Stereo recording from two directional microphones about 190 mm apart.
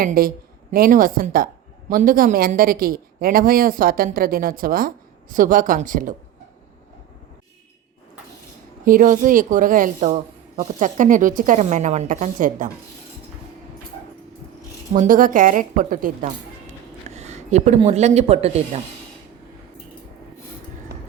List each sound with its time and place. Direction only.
0.0 s a man's voice: 50° right (ahead or behind)
8.8 s a man's voice: 45° right (ahead or behind)
14.9 s a man's voice: 45° right (ahead or behind)
17.2 s a sound: 35° right (ahead or behind)
17.7 s speech: 35° right (ahead or behind)